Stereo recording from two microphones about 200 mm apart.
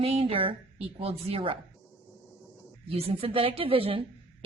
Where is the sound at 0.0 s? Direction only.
30° right (ahead or behind).